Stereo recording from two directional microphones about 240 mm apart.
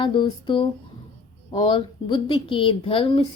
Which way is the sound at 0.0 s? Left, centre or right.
Centre.